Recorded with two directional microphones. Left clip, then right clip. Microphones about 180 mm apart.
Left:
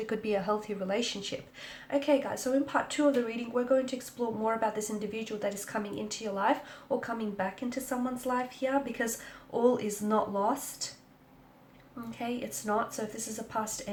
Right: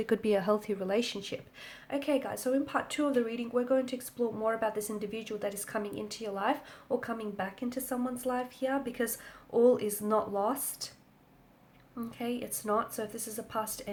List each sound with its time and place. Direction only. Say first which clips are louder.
0.0 s speech: right 3 dB; 45° right (ahead or behind)
12.6 s speech: even; 40° right (ahead or behind)